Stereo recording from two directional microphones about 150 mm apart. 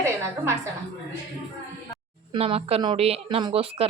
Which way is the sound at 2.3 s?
40° right (ahead or behind).